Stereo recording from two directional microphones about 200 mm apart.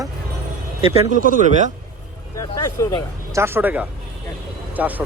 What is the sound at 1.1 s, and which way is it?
Speech, 40° right (ahead or behind).